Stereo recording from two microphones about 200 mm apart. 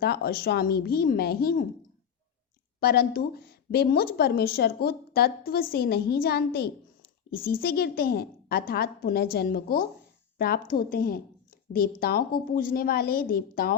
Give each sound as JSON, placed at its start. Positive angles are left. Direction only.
{"t": 0.0, "sound": "a woman's voice", "side_deg": 50}
{"t": 2.8, "sound": "a woman's voice", "side_deg": 50}